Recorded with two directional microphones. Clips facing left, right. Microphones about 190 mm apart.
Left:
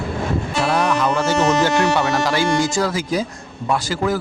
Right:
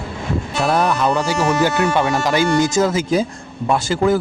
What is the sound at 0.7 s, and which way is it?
Speech, 30° right (ahead or behind).